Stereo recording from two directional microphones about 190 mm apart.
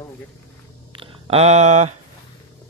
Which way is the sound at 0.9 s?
30° right (ahead or behind).